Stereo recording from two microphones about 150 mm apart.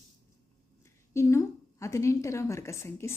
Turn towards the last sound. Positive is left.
turn(degrees=20)  # may be behind; listen again after turning